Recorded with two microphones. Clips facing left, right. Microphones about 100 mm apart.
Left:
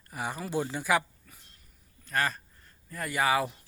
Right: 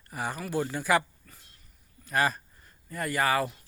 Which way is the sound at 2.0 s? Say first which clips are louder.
Right 3 dB; 10° right (ahead or behind).